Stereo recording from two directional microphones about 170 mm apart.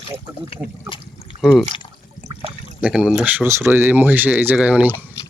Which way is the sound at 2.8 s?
5° right (ahead or behind).